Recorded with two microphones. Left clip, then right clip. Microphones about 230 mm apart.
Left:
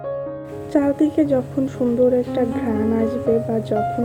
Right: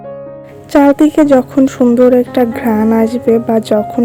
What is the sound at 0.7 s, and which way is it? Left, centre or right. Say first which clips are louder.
A woman's voice: right 10 dB; right.